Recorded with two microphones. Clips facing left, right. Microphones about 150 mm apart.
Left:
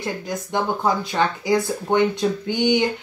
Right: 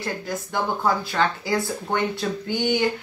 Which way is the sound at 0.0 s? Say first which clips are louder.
Left 2 dB; 20° left (ahead or behind).